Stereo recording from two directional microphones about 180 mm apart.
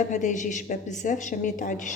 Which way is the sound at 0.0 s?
45° left (ahead or behind).